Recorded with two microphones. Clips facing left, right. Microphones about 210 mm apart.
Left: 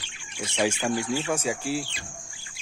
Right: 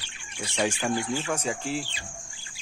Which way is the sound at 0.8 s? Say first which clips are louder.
Left 1 dB; centre (ahead or behind).